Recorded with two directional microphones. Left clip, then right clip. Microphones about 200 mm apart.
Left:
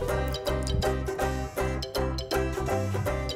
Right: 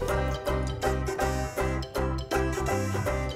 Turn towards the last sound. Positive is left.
turn(degrees=0)  # may be behind; listen again after turning